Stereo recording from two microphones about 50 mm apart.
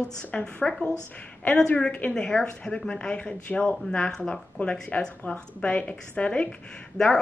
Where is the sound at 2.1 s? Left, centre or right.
Centre.